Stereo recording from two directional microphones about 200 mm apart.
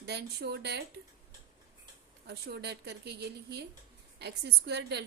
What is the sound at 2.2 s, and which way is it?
A woman's voice, 55° right (ahead or behind).